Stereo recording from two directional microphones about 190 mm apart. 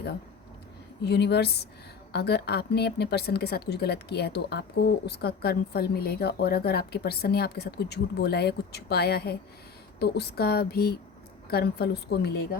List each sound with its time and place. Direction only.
1.0 s a woman's voice: 60° left (ahead or behind)